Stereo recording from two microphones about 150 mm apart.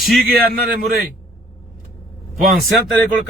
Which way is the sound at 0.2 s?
85° right.